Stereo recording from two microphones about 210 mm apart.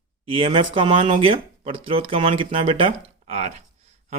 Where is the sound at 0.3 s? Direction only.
25° right (ahead or behind).